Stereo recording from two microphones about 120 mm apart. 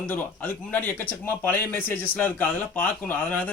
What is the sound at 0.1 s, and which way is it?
A man's voice, 15° left (ahead or behind).